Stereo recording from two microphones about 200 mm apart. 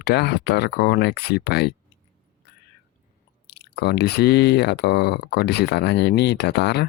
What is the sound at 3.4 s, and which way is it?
Speech, 55° left (ahead or behind).